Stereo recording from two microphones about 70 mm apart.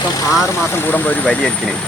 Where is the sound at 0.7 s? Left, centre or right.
Left; by 1.8 s centre.